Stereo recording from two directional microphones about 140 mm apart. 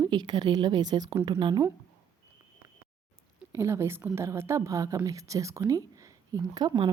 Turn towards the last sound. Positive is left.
turn(degrees=-30)  # may be behind; listen again after turning